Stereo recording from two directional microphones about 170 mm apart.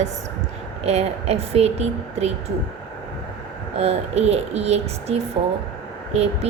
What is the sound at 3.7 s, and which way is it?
Speech, 40° right (ahead or behind).